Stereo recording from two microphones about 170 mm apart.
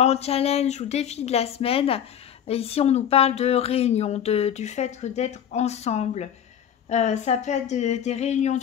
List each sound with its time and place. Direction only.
0.0 s speech: 40° left (ahead or behind)